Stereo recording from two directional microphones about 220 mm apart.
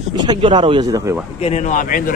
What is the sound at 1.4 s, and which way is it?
Speech, 30° left (ahead or behind).